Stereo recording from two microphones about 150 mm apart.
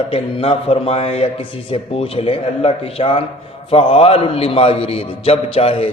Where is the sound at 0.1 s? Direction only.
40° left (ahead or behind).